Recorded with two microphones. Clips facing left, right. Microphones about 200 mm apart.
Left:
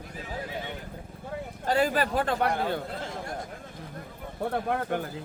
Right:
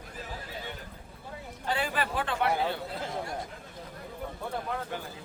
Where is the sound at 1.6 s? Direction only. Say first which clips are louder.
Left 6 dB; 40° left (ahead or behind).